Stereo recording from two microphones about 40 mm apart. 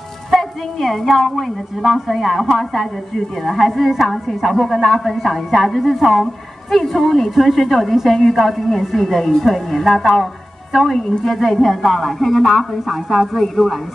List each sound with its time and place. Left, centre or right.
0.3 s a woman's voice: centre